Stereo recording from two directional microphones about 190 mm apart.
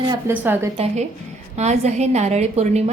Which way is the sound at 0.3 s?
10° right (ahead or behind).